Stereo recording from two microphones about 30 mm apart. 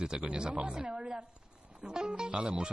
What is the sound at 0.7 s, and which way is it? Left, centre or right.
Speech, right.